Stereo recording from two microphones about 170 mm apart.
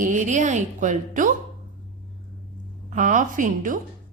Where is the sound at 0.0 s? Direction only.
45° right (ahead or behind).